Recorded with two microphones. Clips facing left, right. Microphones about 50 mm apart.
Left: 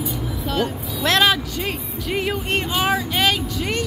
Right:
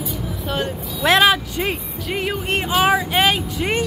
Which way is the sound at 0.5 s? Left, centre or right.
Centre.